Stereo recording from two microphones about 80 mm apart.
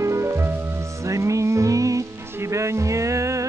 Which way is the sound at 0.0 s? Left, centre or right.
Right.